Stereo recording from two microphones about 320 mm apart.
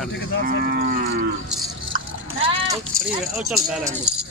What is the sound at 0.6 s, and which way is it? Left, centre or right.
Livestock, right.